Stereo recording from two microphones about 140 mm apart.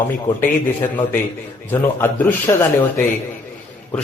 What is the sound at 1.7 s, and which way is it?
Speech, 15° left (ahead or behind).